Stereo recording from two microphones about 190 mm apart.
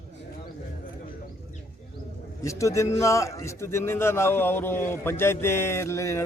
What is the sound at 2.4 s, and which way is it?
A man's voice, 15° left (ahead or behind).